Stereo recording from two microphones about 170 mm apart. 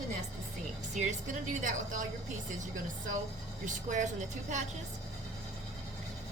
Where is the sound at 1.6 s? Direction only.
50° right (ahead or behind).